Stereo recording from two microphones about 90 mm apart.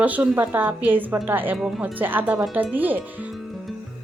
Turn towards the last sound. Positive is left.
turn(degrees=-20)  # may be behind; listen again after turning